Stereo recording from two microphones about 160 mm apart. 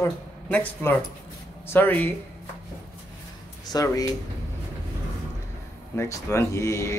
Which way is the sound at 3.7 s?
20° left (ahead or behind).